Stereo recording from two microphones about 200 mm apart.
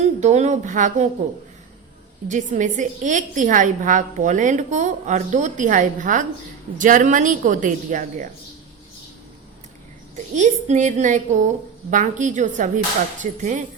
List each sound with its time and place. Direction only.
0.0 s a woman's voice: 35° right (ahead or behind)
2.3 s a woman's voice: 40° right (ahead or behind)
10.3 s a woman's voice: 35° right (ahead or behind)